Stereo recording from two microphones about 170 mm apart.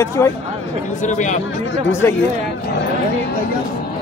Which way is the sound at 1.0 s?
45° left (ahead or behind).